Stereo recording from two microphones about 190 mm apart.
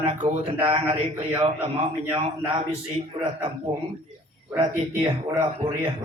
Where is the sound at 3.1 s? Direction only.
35° right (ahead or behind).